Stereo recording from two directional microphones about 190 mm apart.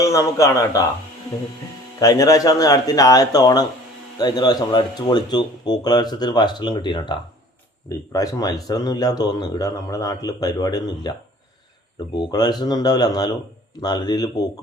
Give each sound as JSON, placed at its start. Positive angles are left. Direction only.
{"t": 0.0, "sound": "a man's voice", "side_deg": 15}
{"t": 2.0, "sound": "speech", "side_deg": 20}
{"t": 12.1, "sound": "speech", "side_deg": 20}